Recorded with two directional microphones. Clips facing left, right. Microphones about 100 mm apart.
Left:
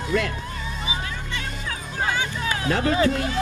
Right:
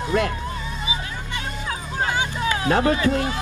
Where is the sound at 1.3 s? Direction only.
25° right (ahead or behind).